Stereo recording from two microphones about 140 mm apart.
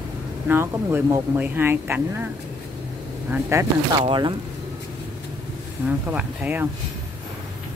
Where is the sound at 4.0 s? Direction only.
35° right (ahead or behind).